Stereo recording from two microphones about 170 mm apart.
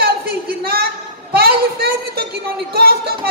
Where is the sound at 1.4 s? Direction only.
65° right (ahead or behind).